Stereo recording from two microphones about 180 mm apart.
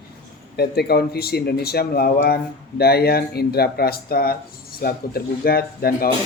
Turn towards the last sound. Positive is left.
turn(degrees=55)  # may be behind; listen again after turning